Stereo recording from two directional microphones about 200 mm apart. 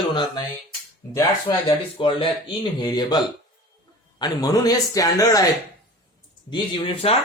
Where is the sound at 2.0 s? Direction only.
25° left (ahead or behind).